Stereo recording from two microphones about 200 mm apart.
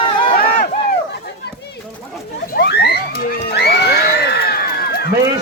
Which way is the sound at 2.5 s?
55° left (ahead or behind).